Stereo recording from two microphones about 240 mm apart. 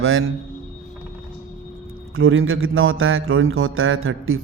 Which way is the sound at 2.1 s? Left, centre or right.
Right.